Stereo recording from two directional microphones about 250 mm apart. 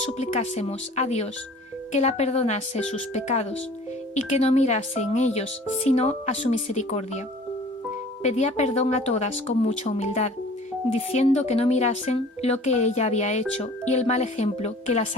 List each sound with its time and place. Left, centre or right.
0.0 s speech: left
8.2 s speech: left